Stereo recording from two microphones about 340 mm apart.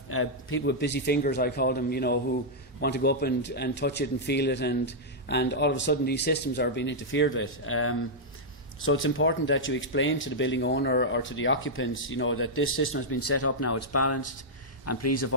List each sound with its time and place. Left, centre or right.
0.1 s speech: left